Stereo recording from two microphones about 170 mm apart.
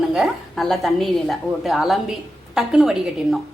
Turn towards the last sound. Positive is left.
turn(degrees=-5)  # may be behind; listen again after turning